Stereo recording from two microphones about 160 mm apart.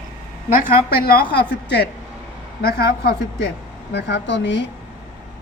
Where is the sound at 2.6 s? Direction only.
75° left (ahead or behind).